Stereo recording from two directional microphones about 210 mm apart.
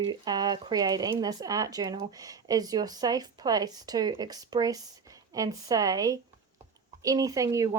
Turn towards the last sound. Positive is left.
turn(degrees=-15)  # may be behind; listen again after turning